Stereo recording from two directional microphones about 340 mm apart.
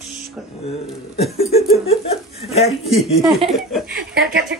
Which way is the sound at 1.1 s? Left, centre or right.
Centre.